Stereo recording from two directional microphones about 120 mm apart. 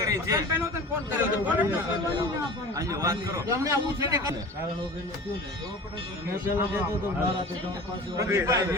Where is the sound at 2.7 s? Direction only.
25° right (ahead or behind).